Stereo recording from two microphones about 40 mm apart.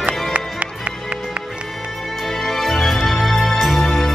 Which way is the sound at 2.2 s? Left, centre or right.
Centre.